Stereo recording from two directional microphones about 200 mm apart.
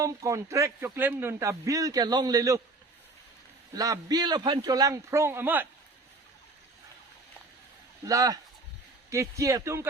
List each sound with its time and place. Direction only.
0.0 s a man's voice: 15° right (ahead or behind)
3.8 s a man's voice: 20° right (ahead or behind)
8.0 s a man's voice: 15° right (ahead or behind)